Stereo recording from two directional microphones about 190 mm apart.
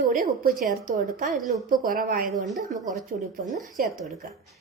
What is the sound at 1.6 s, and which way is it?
Speech, 45° right (ahead or behind).